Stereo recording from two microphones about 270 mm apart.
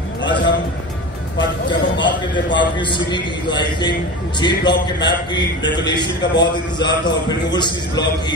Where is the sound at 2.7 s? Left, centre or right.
Centre.